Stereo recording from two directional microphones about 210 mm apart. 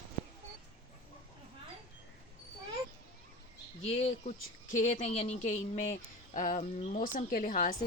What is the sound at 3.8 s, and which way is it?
A woman's voice, 30° left (ahead or behind).